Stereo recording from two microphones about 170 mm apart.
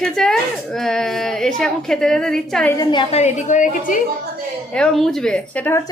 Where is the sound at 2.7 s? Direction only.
25° left (ahead or behind); by 3.9 s 50° left (ahead or behind).